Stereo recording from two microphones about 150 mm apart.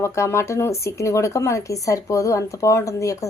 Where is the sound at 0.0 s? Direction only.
20° left (ahead or behind).